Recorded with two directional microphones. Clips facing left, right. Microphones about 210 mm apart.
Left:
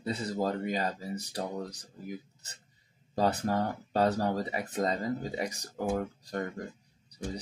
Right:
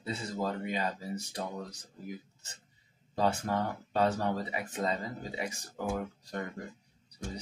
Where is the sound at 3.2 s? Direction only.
40° left (ahead or behind).